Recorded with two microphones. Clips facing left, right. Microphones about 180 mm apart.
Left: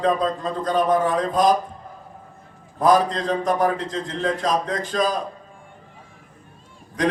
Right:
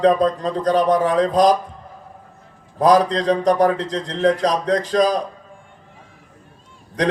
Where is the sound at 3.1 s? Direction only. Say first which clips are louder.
Right 5 dB; 40° right (ahead or behind).